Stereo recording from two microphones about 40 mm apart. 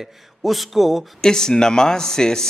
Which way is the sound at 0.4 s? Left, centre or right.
Centre.